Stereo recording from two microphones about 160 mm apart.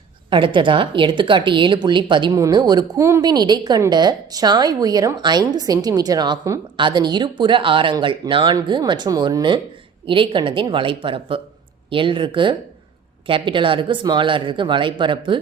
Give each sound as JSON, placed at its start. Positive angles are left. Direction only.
{"t": 0.3, "sound": "a woman's voice", "side_deg": -30}